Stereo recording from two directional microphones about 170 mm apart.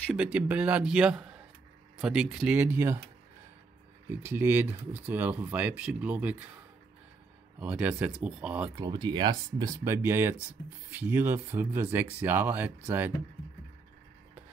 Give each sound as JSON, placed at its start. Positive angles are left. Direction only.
{"t": 0.1, "sound": "a man's voice", "side_deg": -5}
{"t": 4.1, "sound": "speech", "side_deg": -15}
{"t": 7.6, "sound": "speech", "side_deg": -10}
{"t": 8.8, "sound": "speech", "side_deg": -25}